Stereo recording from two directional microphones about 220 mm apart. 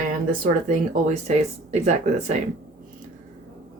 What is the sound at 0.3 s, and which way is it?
A woman's voice, 35° right (ahead or behind).